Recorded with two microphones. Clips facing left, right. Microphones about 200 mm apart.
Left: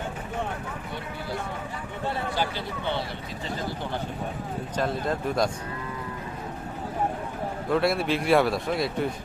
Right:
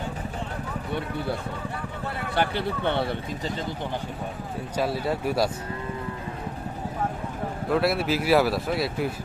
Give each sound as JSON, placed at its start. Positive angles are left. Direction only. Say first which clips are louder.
{"t": 2.3, "sound": "speech", "louder": "right 4 dB", "side_deg": -60}
{"t": 4.8, "sound": "speech", "louder": "right 1 dB", "side_deg": -10}
{"t": 7.7, "sound": "speech", "louder": "even", "side_deg": 0}